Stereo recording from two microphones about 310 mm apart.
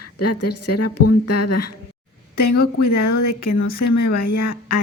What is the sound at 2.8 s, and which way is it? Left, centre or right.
A woman's voice, left.